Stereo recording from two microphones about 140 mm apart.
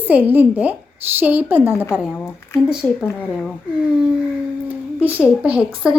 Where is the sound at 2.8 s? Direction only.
15° left (ahead or behind).